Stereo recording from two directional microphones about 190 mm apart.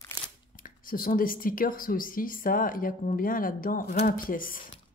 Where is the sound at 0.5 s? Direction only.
45° left (ahead or behind).